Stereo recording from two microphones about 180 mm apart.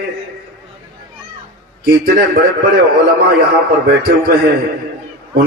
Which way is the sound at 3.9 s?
55° right (ahead or behind).